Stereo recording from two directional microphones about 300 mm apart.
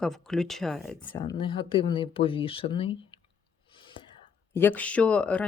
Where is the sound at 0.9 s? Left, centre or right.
Centre.